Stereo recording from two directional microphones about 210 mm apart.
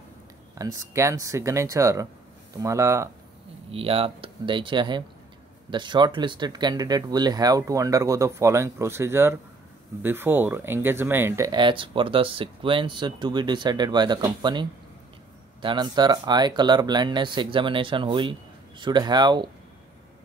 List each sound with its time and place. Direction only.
0.6 s speech: 15° right (ahead or behind)
3.7 s speech: 25° right (ahead or behind)